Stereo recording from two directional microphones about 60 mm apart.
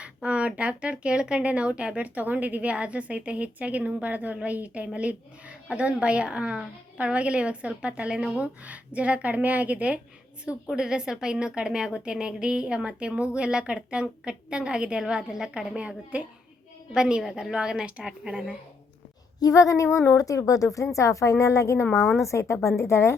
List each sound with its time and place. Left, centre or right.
0.0 s a woman's voice: centre
19.4 s a woman's voice: left
21.8 s a woman's voice: centre
22.3 s a woman's voice: left